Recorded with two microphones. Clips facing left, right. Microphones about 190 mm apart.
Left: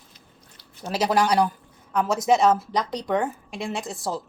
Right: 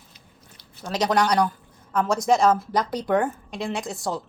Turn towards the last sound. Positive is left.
turn(degrees=0)  # may be behind; listen again after turning